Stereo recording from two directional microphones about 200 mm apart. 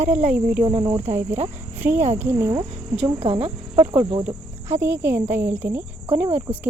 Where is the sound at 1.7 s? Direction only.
10° right (ahead or behind).